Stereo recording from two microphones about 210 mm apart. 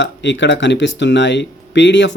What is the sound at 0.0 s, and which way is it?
Speech, 55° left (ahead or behind).